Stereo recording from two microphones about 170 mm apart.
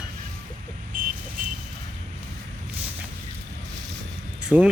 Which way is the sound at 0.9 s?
55° right (ahead or behind).